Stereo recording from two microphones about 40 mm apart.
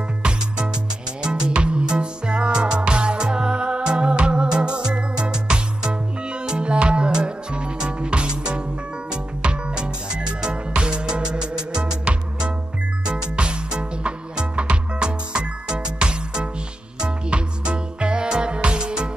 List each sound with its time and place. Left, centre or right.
1.2 s music: centre
11.8 s music: right
13.0 s music: right